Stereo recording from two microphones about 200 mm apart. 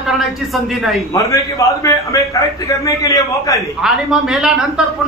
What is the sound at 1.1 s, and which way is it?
A man's voice, 15° left (ahead or behind).